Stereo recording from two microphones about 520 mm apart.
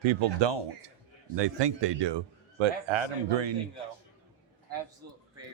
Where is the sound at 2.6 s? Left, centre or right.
Right.